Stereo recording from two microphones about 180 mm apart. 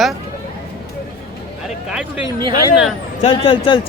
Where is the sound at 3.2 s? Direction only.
30° left (ahead or behind).